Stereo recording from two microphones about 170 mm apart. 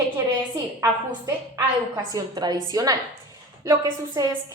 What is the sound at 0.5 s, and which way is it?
A woman's voice, 20° right (ahead or behind).